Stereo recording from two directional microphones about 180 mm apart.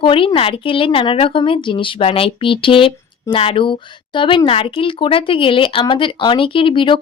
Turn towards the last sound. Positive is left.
turn(degrees=30)  # may be behind; listen again after turning